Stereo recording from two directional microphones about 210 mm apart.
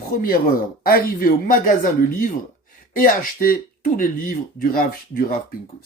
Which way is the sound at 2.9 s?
40° left (ahead or behind).